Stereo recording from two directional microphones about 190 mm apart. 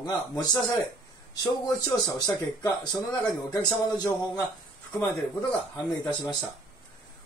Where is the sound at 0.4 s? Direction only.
20° left (ahead or behind).